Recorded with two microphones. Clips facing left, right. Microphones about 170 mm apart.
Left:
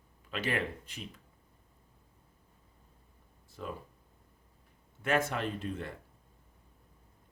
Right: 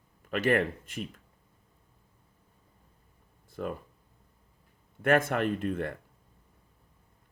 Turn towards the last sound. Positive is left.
turn(degrees=-55)  # may be behind; listen again after turning